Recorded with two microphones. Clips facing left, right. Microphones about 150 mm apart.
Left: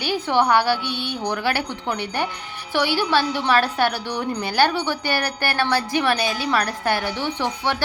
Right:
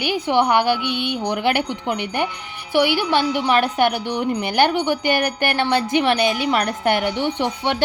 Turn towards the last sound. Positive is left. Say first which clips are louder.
# right 2 dB
turn(degrees=-20)  # may be behind; listen again after turning